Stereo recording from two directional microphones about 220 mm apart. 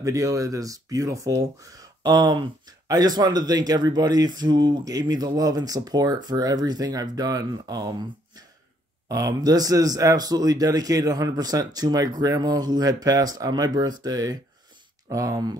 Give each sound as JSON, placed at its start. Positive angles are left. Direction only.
{"t": 0.0, "sound": "speech", "side_deg": -15}